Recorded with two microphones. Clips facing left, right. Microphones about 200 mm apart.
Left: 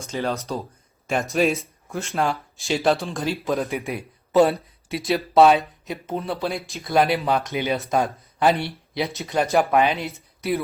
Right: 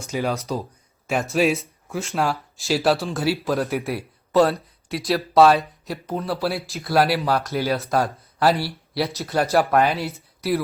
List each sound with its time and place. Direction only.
0.1 s speech: 10° right (ahead or behind)
7.4 s speech: 20° left (ahead or behind)
7.7 s speech: centre (ahead or behind)